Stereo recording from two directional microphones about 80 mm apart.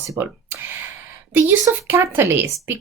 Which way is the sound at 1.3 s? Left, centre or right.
Right.